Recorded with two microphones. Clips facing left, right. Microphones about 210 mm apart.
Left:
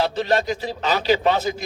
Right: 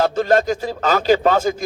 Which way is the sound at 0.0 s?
45° right (ahead or behind).